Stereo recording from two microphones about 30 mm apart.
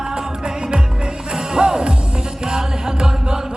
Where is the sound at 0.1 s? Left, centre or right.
Right.